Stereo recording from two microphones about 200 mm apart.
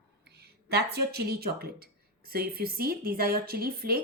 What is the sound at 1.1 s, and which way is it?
A woman's voice, 50° right (ahead or behind).